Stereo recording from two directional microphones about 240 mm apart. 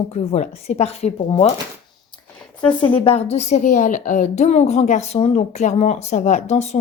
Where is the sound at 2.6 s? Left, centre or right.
Centre.